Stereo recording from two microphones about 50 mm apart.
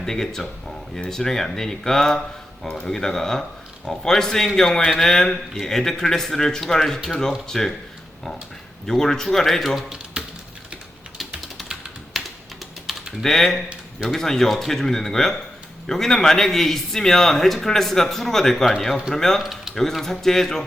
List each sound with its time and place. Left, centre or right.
0.0 s a man's voice: centre
8.9 s a man's voice: centre
10.2 s typing: right
11.3 s typing: centre
13.2 s a man's voice: centre
19.4 s mechanisms: centre
19.7 s a man's voice: centre